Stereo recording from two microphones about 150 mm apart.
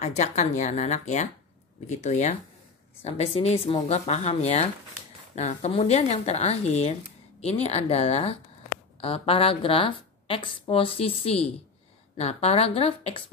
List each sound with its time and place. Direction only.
0.0 s a woman's voice: 50° left (ahead or behind)